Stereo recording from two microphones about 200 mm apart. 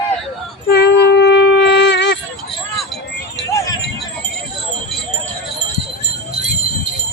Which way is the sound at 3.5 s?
15° left (ahead or behind).